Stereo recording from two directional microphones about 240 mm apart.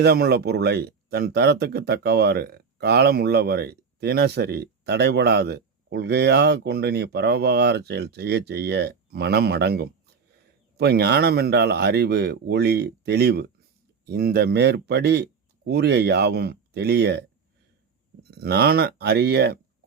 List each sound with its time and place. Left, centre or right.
0.0 s speech: right